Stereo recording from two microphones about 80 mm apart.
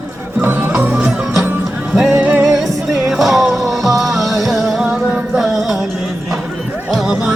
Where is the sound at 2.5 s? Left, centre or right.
Centre.